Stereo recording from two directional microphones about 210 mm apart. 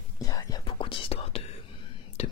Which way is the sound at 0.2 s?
15° left (ahead or behind).